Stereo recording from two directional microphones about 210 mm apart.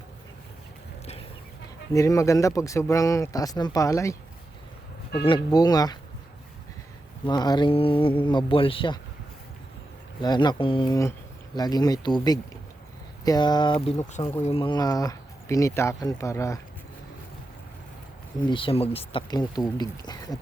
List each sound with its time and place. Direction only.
1.9 s speech: 15° left (ahead or behind)
5.2 s speech: 20° left (ahead or behind)
7.3 s speech: 20° left (ahead or behind)
10.2 s speech: 20° left (ahead or behind)
18.5 s speech: 25° left (ahead or behind)